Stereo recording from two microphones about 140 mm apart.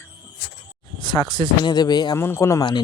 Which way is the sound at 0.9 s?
35° left (ahead or behind).